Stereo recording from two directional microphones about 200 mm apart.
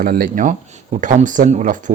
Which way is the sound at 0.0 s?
45° right (ahead or behind).